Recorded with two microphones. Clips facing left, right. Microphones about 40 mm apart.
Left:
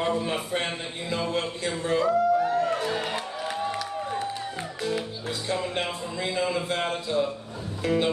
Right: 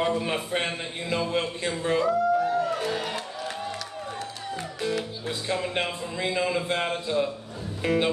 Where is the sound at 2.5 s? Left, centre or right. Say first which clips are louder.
Left 1 dB; left.